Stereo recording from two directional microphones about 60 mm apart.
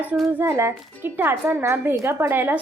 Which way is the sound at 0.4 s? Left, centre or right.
Right.